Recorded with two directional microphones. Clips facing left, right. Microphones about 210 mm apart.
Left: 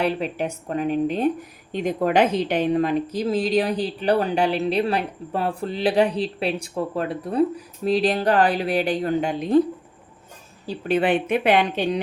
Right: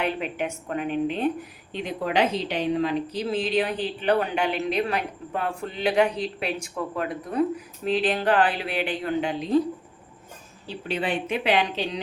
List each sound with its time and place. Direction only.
0.0 s a woman's voice: 35° left (ahead or behind)
10.7 s speech: 50° left (ahead or behind)